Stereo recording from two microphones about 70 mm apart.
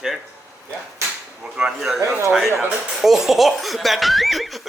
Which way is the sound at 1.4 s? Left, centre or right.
Centre.